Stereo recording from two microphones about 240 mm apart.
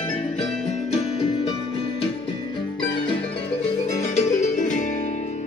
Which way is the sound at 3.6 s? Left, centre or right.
Left.